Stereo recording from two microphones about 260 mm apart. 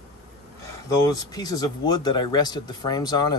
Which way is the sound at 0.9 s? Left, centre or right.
Centre.